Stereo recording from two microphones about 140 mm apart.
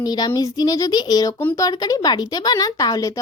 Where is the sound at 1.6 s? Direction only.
25° left (ahead or behind).